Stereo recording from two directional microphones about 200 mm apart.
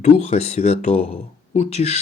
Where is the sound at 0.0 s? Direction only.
35° left (ahead or behind).